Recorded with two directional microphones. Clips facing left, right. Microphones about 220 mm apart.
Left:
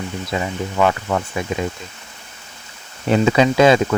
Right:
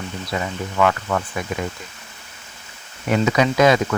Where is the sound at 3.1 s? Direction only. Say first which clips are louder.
Left 3 dB; 30° left (ahead or behind).